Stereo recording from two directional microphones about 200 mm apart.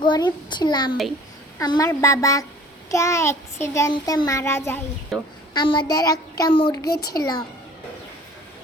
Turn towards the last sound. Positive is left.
turn(degrees=20)  # may be behind; listen again after turning